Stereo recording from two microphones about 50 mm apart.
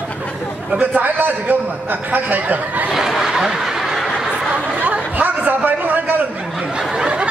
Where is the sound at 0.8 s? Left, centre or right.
Right.